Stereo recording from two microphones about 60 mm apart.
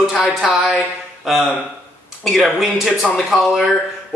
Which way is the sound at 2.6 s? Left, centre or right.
Centre.